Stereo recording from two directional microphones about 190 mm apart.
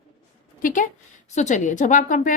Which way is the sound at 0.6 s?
45° left (ahead or behind).